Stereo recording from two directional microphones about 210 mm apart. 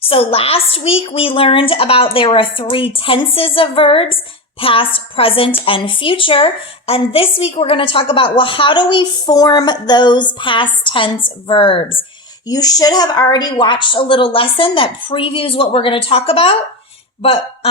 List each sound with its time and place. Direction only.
0.0 s a woman's voice: 25° left (ahead or behind)